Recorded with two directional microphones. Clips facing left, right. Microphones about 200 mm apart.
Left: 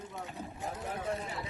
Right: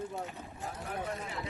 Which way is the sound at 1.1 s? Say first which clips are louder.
Left 3 dB; 35° left (ahead or behind).